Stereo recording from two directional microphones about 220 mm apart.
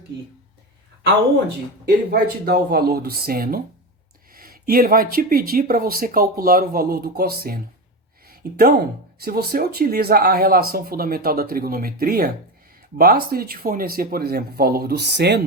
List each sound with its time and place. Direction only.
2.0 s speech: 45° right (ahead or behind)
8.3 s a sound: 45° right (ahead or behind)
9.1 s speech: 45° right (ahead or behind)